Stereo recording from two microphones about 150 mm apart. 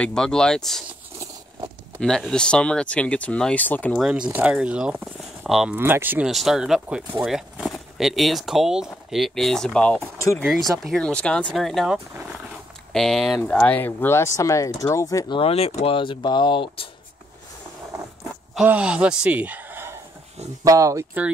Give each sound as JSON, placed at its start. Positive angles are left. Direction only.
{"t": 0.0, "sound": "speech", "side_deg": 5}
{"t": 2.0, "sound": "speech", "side_deg": 5}
{"t": 4.0, "sound": "speech", "side_deg": -5}
{"t": 18.5, "sound": "speech", "side_deg": -5}